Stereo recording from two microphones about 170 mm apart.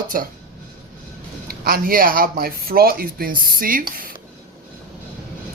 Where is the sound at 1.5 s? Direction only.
60° right (ahead or behind).